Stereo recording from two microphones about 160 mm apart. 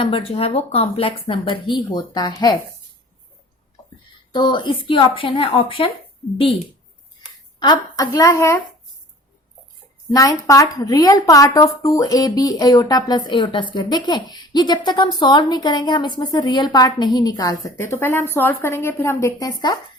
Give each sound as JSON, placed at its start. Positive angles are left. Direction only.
{"t": 0.0, "sound": "speech", "side_deg": 35}
{"t": 4.3, "sound": "speech", "side_deg": 30}
{"t": 7.2, "sound": "speech", "side_deg": 25}
{"t": 10.2, "sound": "a woman's voice", "side_deg": 20}